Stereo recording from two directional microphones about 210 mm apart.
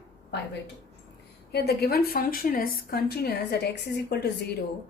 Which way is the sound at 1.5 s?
50° left (ahead or behind).